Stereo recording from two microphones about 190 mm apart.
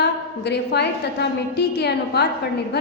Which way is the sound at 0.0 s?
60° left (ahead or behind).